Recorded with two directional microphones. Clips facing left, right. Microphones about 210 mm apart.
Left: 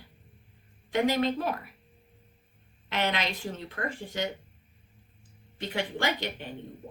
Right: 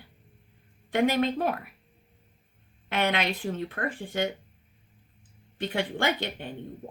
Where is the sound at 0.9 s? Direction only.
55° right (ahead or behind).